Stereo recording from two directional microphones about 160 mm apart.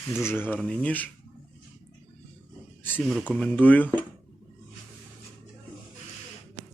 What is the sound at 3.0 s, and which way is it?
Speech, centre (ahead or behind).